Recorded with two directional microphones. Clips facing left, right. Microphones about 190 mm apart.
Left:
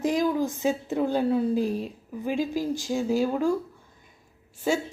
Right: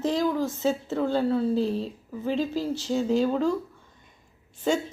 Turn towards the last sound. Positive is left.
turn(degrees=5)  # may be behind; listen again after turning